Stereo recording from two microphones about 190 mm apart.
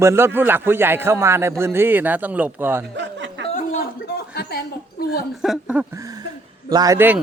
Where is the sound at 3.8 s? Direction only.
60° left (ahead or behind).